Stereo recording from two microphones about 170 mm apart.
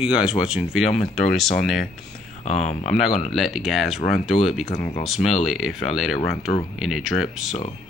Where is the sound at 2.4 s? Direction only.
40° left (ahead or behind).